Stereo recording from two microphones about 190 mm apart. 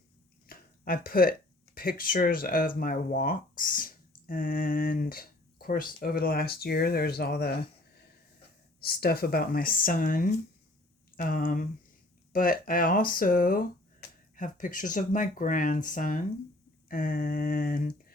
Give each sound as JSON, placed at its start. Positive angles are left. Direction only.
{"t": 0.4, "sound": "speech", "side_deg": 50}
{"t": 8.8, "sound": "speech", "side_deg": 55}